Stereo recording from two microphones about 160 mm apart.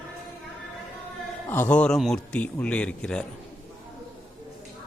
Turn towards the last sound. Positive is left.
turn(degrees=5)  # may be behind; listen again after turning